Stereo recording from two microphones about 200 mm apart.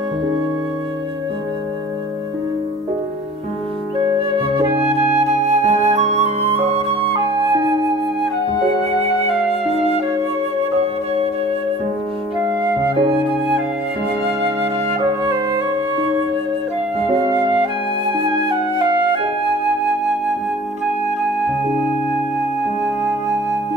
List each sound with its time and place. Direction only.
4.4 s flute: 30° right (ahead or behind)
9.7 s flute: 30° right (ahead or behind)
18.1 s music: 25° right (ahead or behind)